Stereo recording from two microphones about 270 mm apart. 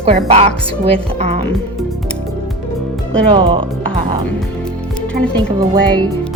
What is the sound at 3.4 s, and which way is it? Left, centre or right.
Speech, centre.